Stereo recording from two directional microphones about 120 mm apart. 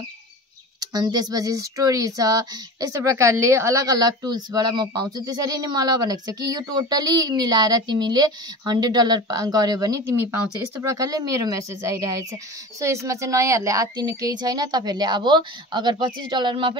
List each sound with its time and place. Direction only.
0.7 s speech: 35° right (ahead or behind)